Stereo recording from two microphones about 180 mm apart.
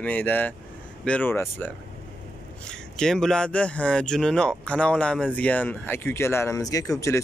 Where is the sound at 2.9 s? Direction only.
5° left (ahead or behind).